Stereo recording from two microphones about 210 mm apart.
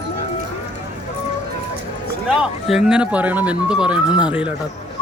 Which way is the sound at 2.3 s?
5° right (ahead or behind).